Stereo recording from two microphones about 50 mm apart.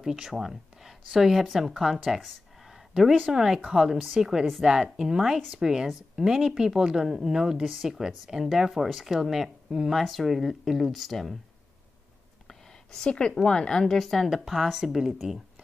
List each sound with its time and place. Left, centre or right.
0.0 s a woman's voice: centre
12.4 s a sound: centre
13.5 s speech: centre
13.8 s speech: centre